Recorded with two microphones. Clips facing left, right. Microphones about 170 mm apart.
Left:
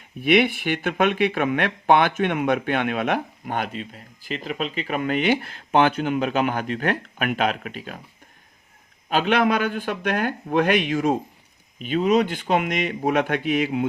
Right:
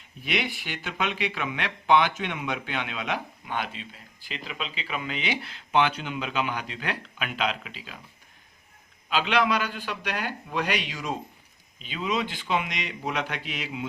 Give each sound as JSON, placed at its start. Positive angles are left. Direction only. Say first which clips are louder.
{"t": 0.2, "sound": "speech", "louder": "left 12 dB", "side_deg": 55}
{"t": 9.0, "sound": "speech", "louder": "left 5 dB", "side_deg": 50}